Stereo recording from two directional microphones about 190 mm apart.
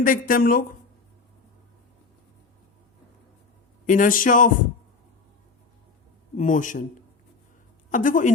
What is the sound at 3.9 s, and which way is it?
Speech, 45° left (ahead or behind).